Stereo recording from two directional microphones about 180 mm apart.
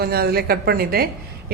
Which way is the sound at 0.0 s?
60° right (ahead or behind).